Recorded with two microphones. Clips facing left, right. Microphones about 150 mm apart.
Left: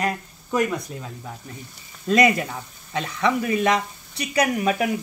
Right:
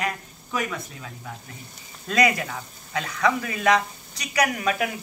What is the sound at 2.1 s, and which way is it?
Speech, 25° left (ahead or behind).